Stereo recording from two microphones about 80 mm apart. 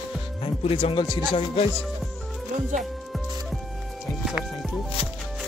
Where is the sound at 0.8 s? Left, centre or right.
Left.